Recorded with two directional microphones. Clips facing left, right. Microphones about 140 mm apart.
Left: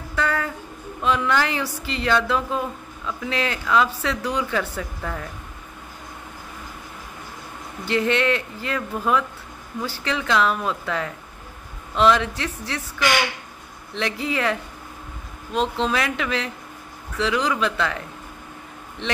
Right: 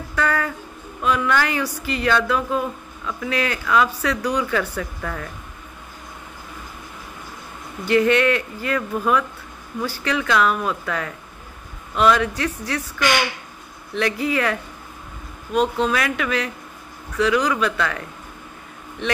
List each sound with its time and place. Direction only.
0.1 s a sound: 25° left (ahead or behind)
1.0 s speech: 25° left (ahead or behind)
7.8 s speech: 25° left (ahead or behind)
13.9 s speech: 25° left (ahead or behind)
15.5 s speech: 10° right (ahead or behind)
15.9 s speech: 25° left (ahead or behind)